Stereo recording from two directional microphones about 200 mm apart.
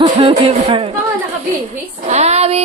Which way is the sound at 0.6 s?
25° right (ahead or behind).